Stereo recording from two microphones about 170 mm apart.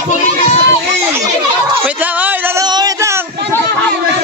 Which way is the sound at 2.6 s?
25° right (ahead or behind).